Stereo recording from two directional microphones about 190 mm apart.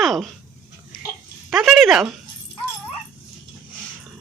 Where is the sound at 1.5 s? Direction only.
Centre (ahead or behind).